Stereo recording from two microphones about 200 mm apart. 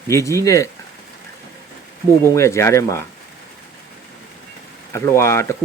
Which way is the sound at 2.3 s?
15° left (ahead or behind).